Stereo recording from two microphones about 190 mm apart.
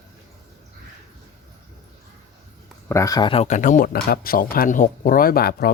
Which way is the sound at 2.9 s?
20° left (ahead or behind).